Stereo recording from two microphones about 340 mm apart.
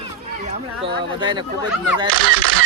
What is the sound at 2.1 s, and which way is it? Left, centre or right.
Speech, left.